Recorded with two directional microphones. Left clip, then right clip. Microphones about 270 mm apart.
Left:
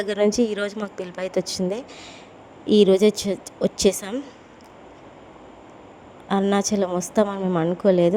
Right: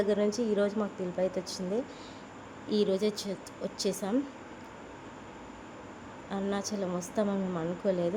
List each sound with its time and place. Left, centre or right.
0.0 s a woman's voice: left
6.2 s a woman's voice: left